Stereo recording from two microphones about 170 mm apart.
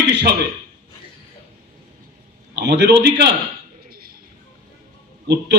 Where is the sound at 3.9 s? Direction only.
60° right (ahead or behind).